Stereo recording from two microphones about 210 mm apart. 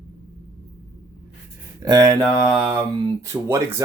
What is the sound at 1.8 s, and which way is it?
Speech, 15° right (ahead or behind).